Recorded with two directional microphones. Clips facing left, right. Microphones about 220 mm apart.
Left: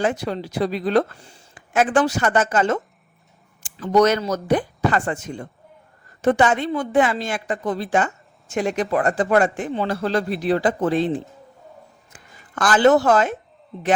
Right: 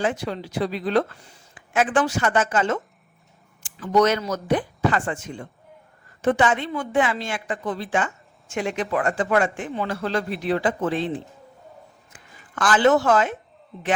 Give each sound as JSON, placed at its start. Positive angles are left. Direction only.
{"t": 0.0, "sound": "a woman's voice", "side_deg": 40}
{"t": 12.1, "sound": "speech", "side_deg": 40}
{"t": 13.7, "sound": "speech", "side_deg": 0}